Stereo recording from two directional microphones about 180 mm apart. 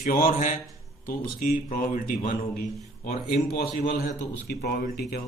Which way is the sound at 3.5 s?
60° left (ahead or behind).